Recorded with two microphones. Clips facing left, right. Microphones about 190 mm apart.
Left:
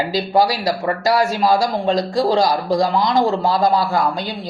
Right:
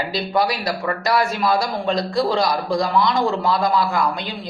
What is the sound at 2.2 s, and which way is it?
Speech, 40° left (ahead or behind).